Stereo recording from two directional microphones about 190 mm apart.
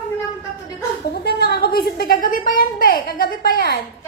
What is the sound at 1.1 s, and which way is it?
A woman's voice, 55° left (ahead or behind).